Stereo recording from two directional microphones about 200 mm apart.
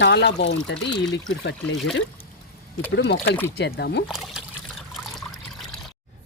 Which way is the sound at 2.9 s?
60° left (ahead or behind).